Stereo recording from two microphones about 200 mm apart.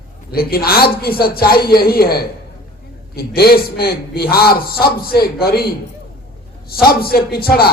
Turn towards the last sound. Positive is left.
turn(degrees=50)  # may be behind; listen again after turning